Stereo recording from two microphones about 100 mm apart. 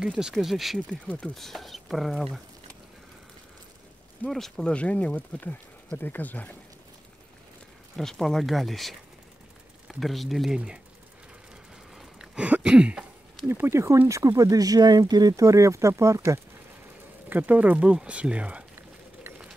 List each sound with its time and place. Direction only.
0.0 s speech: 5° right (ahead or behind)
0.7 s speech: 10° left (ahead or behind)
4.3 s speech: 5° left (ahead or behind)
7.9 s speech: 5° left (ahead or behind)
11.9 s a sound: 5° right (ahead or behind)
13.5 s speech: 25° right (ahead or behind)
17.3 s speech: 15° right (ahead or behind)